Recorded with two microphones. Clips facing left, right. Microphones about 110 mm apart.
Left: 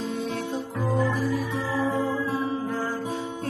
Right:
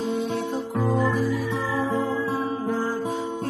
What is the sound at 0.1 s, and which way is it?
Music, 25° right (ahead or behind).